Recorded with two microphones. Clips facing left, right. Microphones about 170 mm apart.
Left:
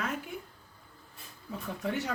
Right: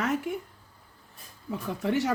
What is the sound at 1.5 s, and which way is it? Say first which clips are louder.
Speech: right 6 dB; 80° right.